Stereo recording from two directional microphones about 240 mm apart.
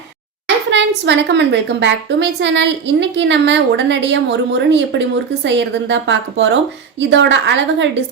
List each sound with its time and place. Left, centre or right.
0.4 s speech: right